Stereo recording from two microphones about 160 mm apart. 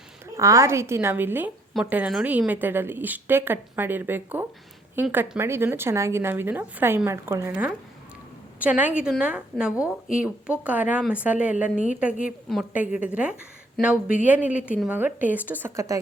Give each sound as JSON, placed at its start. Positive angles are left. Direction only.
{"t": 0.3, "sound": "a woman's voice", "side_deg": -20}
{"t": 12.7, "sound": "a woman's voice", "side_deg": -10}